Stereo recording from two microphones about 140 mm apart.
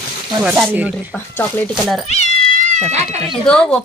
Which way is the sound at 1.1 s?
15° left (ahead or behind).